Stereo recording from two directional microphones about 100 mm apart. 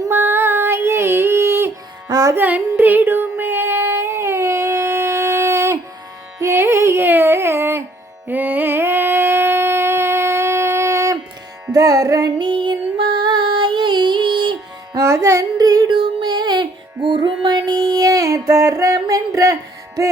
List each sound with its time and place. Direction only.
0.1 s female singing: 20° right (ahead or behind)
2.0 s music: 40° right (ahead or behind)
2.3 s female singing: 15° right (ahead or behind)
6.4 s music: 25° right (ahead or behind)
8.3 s a sound: 20° right (ahead or behind)
11.7 s music: 35° right (ahead or behind)
12.4 s music: 50° right (ahead or behind)
14.9 s music: 30° right (ahead or behind)
18.9 s a sound: 35° right (ahead or behind)